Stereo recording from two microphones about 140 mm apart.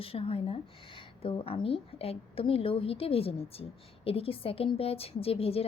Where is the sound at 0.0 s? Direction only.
45° left (ahead or behind).